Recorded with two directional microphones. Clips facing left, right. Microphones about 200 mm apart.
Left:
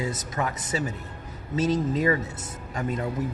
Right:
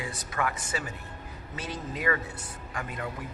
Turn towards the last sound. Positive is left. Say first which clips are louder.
# left 7 dB
turn(degrees=25)  # may be behind; listen again after turning